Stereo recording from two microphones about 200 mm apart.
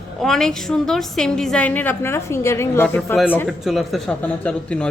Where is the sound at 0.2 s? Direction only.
Centre (ahead or behind).